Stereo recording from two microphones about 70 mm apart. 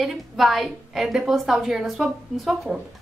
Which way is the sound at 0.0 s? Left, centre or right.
Centre.